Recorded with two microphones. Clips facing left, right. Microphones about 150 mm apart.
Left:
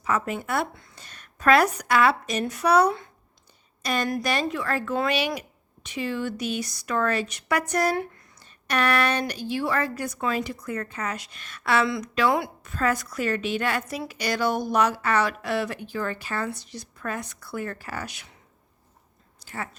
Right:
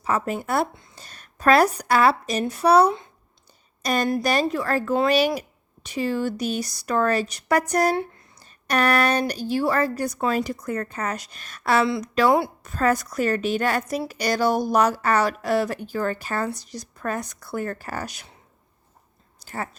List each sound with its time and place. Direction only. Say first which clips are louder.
0.0 s a woman's voice: right 2 dB; 35° right (ahead or behind)
3.8 s speech: right 4 dB; 40° right (ahead or behind)
19.4 s a sound: right 3 dB; 40° right (ahead or behind)